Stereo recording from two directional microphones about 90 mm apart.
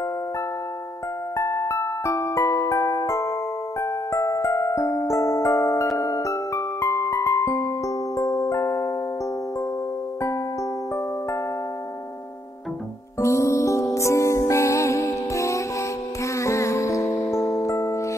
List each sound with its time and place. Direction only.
1.3 s music: 35° left (ahead or behind)
13.2 s music: 35° left (ahead or behind)